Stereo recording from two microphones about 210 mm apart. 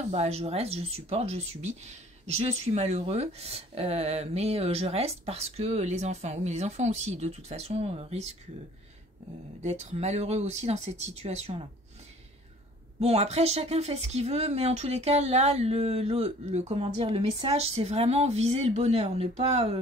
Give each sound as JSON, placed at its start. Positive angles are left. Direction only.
{"t": 0.1, "sound": "speech", "side_deg": -30}
{"t": 9.6, "sound": "speech", "side_deg": -30}
{"t": 13.0, "sound": "speech", "side_deg": -30}